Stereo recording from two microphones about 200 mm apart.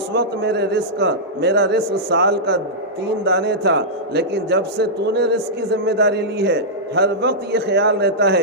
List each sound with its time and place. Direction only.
0.1 s a man's voice: 55° right (ahead or behind)